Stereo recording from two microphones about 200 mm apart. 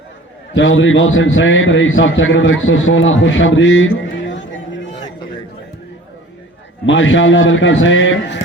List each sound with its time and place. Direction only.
0.5 s a man's voice: 70° left (ahead or behind)
6.8 s a man's voice: 70° left (ahead or behind)